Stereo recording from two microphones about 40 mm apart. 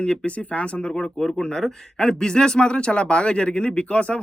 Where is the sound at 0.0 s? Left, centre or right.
Left.